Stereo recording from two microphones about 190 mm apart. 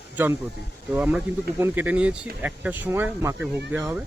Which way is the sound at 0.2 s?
10° right (ahead or behind).